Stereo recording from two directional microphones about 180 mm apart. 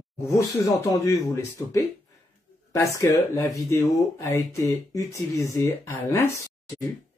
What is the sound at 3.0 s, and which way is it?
Speech, 20° left (ahead or behind).